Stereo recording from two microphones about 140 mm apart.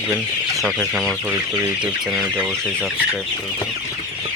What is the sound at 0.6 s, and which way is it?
Speech, 5° right (ahead or behind).